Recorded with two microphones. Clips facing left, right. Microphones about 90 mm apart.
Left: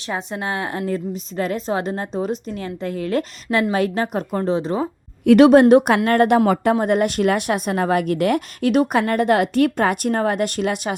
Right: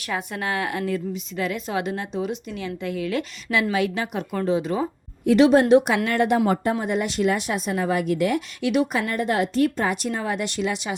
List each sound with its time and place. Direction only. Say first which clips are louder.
0.1 s a woman's voice: left 2 dB; 25° left (ahead or behind)
5.2 s a woman's voice: left 6 dB; 60° left (ahead or behind)
9.0 s a woman's voice: left 6 dB; 60° left (ahead or behind)